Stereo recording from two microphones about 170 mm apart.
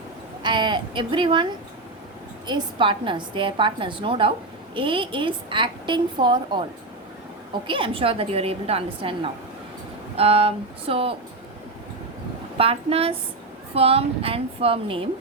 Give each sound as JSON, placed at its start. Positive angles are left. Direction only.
{"t": 0.4, "sound": "a woman's voice", "side_deg": -25}
{"t": 2.5, "sound": "a woman's voice", "side_deg": -30}
{"t": 7.7, "sound": "a woman's voice", "side_deg": -30}
{"t": 12.5, "sound": "a woman's voice", "side_deg": -35}